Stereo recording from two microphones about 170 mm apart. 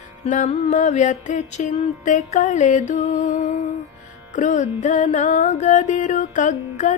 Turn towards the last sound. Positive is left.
turn(degrees=45)  # may be behind; listen again after turning